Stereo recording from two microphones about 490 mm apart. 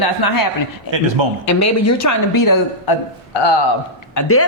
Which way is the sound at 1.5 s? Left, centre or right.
Left.